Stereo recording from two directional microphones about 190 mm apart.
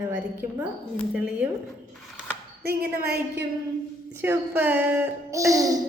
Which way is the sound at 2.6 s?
55° right (ahead or behind).